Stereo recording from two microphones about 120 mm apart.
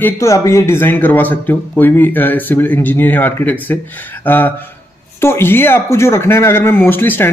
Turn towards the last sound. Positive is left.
turn(degrees=15)  # may be behind; listen again after turning